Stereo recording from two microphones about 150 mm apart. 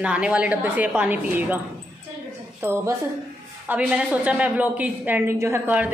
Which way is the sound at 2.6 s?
15° right (ahead or behind).